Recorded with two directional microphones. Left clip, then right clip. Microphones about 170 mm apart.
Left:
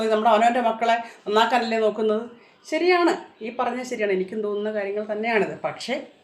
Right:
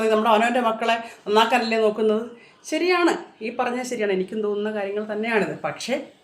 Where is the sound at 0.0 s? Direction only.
10° right (ahead or behind).